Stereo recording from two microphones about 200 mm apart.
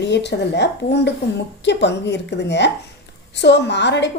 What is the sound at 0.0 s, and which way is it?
A woman's voice, 60° left (ahead or behind).